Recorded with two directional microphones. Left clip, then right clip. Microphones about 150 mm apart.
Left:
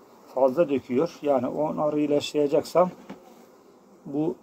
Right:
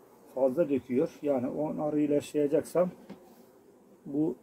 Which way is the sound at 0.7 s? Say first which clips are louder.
Left 4 dB; 10° right (ahead or behind).